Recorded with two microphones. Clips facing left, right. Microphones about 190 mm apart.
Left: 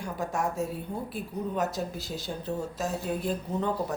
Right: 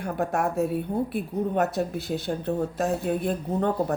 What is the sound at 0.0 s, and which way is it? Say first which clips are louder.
A woman's voice: right 5 dB; 60° right (ahead or behind).